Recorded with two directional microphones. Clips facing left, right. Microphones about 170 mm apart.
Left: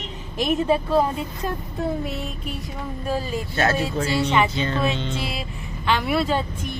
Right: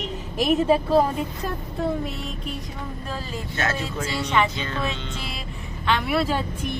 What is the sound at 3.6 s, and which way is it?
Speech, 35° left (ahead or behind).